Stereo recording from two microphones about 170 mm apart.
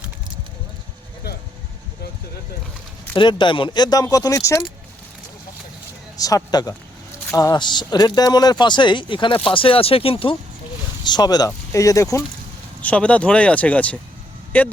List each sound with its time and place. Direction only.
3.2 s speech: 25° left (ahead or behind)
6.1 s speech: 20° left (ahead or behind)
12.8 s speech: 10° left (ahead or behind)